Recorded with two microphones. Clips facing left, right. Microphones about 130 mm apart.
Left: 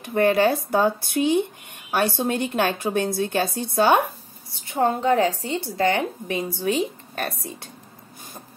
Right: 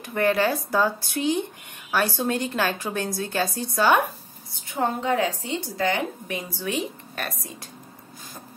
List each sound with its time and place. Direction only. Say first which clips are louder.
0.0 s a woman's voice: left 3 dB; 30° left (ahead or behind)
4.7 s a woman's voice: left 4 dB; 35° left (ahead or behind)